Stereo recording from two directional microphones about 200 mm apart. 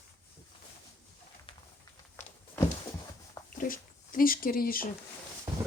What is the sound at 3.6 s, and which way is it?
Speech, 45° left (ahead or behind).